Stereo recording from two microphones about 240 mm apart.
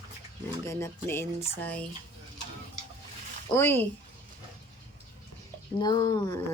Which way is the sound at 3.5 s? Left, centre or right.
Centre.